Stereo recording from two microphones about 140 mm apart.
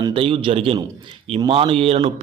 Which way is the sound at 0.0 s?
40° right (ahead or behind).